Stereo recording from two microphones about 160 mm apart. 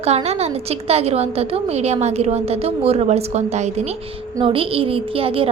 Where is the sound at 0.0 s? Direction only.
40° right (ahead or behind).